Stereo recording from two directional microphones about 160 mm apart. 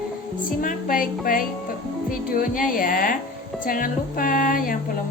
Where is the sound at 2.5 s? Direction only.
60° left (ahead or behind).